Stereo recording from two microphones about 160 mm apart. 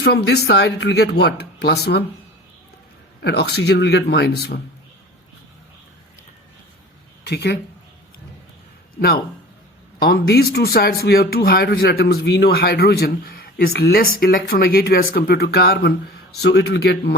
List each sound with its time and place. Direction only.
0.0 s speech: 90° left
3.2 s speech: 90° left
7.3 s speech: 90° left
9.0 s a man's voice: 70° left (ahead or behind); by 17.2 s 90° left